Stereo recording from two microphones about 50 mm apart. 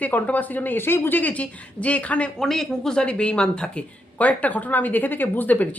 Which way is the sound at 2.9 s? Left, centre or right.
Centre.